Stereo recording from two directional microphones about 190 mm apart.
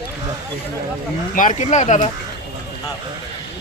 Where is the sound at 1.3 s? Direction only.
45° left (ahead or behind).